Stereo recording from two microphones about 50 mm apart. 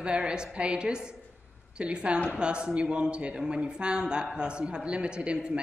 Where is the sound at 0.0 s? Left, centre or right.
Centre.